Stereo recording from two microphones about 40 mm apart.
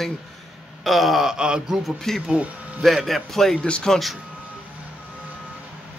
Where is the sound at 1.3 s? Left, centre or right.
Right.